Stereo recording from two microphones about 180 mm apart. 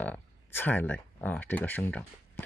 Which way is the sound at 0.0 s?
10° left (ahead or behind).